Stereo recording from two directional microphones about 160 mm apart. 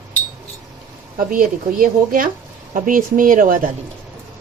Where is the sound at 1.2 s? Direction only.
60° right (ahead or behind).